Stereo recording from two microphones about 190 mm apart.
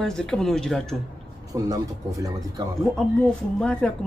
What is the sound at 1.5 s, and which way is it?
Speech, 20° right (ahead or behind).